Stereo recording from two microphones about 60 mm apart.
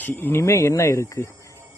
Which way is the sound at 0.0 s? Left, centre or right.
Left.